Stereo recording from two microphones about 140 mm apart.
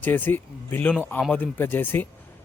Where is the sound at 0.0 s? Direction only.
15° left (ahead or behind).